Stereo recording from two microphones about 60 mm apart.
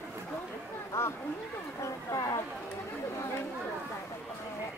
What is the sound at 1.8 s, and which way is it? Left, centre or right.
Speech, left.